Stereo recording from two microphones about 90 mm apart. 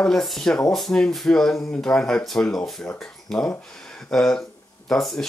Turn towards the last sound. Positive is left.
turn(degrees=5)  # may be behind; listen again after turning